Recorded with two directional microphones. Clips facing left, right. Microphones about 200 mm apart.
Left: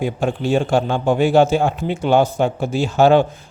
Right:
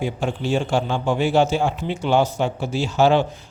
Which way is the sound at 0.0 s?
55° left (ahead or behind).